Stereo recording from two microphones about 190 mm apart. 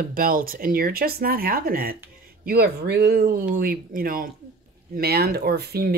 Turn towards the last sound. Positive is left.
turn(degrees=-55)  # may be behind; listen again after turning